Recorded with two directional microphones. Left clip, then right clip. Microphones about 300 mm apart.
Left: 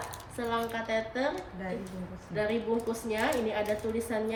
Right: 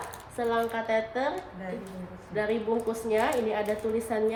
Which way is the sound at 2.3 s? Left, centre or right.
Centre.